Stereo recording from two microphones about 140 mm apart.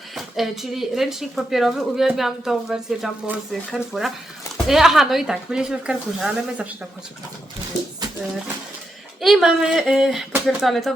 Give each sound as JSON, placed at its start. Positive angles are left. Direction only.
{"t": 0.1, "sound": "speech", "side_deg": 0}
{"t": 9.2, "sound": "speech", "side_deg": 0}